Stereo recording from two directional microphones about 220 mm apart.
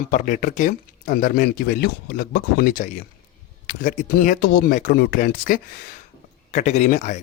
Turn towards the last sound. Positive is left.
turn(degrees=35)  # may be behind; listen again after turning